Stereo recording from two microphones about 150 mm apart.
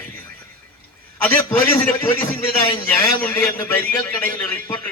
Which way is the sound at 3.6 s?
15° left (ahead or behind).